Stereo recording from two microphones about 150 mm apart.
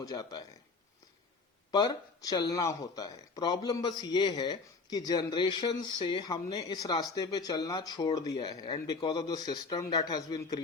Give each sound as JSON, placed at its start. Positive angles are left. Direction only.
{"t": 0.0, "sound": "speech", "side_deg": 25}
{"t": 1.7, "sound": "speech", "side_deg": 25}